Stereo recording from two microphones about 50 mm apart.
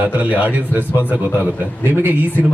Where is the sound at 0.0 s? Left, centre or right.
Right.